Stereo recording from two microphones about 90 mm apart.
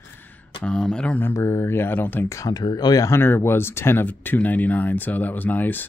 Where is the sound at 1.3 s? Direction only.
30° left (ahead or behind).